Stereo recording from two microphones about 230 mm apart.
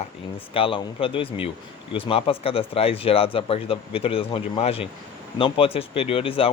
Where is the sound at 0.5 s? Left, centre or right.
Left.